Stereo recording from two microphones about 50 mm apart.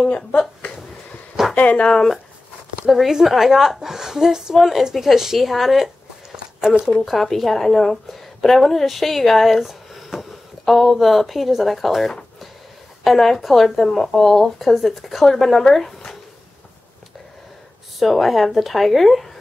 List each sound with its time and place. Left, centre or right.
0.1 s speech: left
1.9 s speech: centre
2.9 s a woman's voice: centre
6.3 s a sound: centre
7.1 s a woman's voice: centre
17.9 s speech: centre